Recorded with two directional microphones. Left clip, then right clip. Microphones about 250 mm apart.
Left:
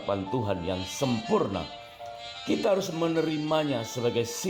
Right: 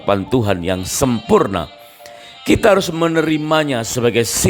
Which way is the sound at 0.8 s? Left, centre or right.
Right.